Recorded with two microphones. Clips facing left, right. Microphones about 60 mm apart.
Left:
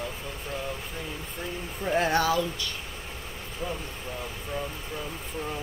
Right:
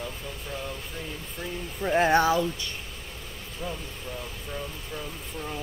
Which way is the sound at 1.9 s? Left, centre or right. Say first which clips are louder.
Right 3 dB; right.